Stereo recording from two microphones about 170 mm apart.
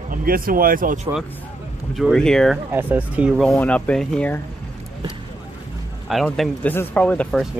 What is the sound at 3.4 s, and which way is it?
Speech, 5° left (ahead or behind).